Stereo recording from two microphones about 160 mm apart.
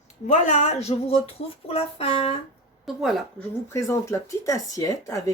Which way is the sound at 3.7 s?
20° left (ahead or behind).